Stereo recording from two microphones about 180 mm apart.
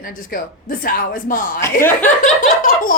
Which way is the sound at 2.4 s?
50° left (ahead or behind).